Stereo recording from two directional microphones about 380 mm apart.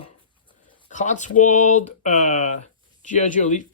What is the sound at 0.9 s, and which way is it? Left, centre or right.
Speech, centre.